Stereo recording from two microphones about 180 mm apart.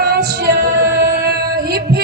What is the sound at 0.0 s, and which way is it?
Music, 60° right (ahead or behind).